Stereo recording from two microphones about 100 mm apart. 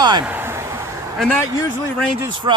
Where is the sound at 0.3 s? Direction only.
25° right (ahead or behind).